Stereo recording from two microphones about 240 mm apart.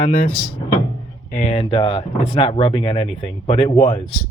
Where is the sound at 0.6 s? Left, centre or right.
Centre.